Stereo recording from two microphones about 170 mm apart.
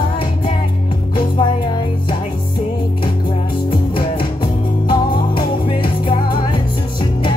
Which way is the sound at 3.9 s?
30° left (ahead or behind).